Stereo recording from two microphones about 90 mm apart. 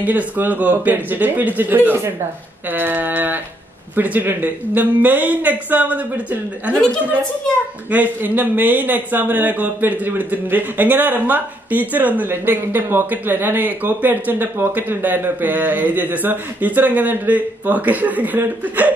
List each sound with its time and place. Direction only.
0.0 s a man's voice: 20° right (ahead or behind)
7.9 s a man's voice: 20° right (ahead or behind)